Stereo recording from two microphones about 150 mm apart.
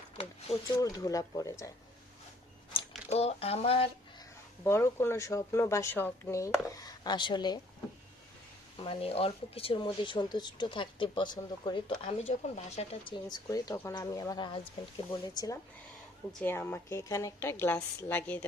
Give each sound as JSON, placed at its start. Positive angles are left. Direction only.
{"t": 0.8, "sound": "speech", "side_deg": 25}
{"t": 3.1, "sound": "speech", "side_deg": 45}
{"t": 4.6, "sound": "speech", "side_deg": 15}
{"t": 8.8, "sound": "speech", "side_deg": 40}
{"t": 12.0, "sound": "speech", "side_deg": 45}
{"t": 13.2, "sound": "speech", "side_deg": 25}
{"t": 16.4, "sound": "a woman's voice", "side_deg": 15}